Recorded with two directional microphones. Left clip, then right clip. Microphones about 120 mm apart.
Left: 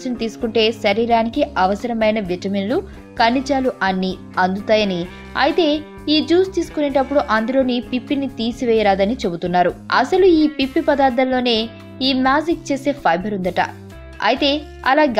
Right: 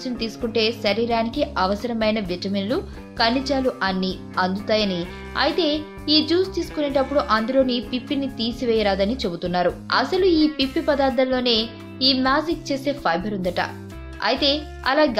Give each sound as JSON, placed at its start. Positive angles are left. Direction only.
{"t": 0.0, "sound": "a woman's voice", "side_deg": 40}